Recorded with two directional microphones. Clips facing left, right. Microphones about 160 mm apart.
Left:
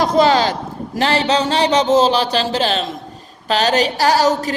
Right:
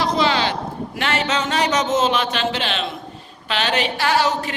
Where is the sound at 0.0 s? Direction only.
45° left (ahead or behind).